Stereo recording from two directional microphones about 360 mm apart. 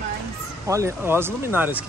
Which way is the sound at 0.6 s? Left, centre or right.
Centre.